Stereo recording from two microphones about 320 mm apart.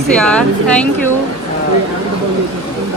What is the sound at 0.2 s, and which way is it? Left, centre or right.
Speech, centre.